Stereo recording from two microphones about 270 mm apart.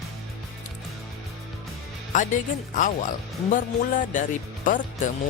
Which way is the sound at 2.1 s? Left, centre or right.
Left.